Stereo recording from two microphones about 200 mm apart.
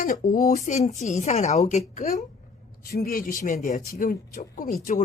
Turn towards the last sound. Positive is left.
turn(degrees=40)  # may be behind; listen again after turning